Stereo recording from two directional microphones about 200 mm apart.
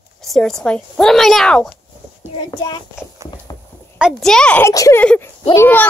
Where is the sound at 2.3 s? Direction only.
20° left (ahead or behind).